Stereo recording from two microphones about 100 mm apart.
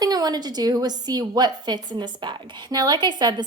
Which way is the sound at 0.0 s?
40° right (ahead or behind).